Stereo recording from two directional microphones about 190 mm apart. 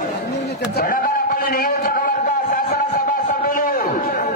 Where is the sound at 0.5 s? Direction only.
55° left (ahead or behind).